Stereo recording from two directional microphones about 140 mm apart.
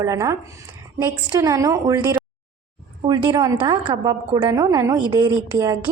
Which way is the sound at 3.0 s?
35° right (ahead or behind).